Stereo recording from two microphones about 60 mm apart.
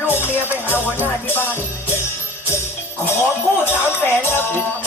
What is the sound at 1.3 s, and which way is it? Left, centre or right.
Music, left.